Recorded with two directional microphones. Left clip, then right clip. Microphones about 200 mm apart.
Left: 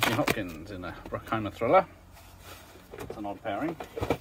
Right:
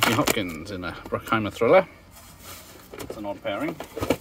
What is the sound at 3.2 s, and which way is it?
Speech, 60° right (ahead or behind).